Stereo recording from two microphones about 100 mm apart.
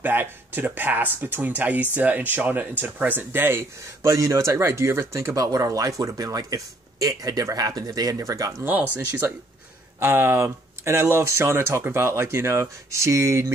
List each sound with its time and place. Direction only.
0.0 s speech: 20° right (ahead or behind)
8.9 s speech: 20° right (ahead or behind)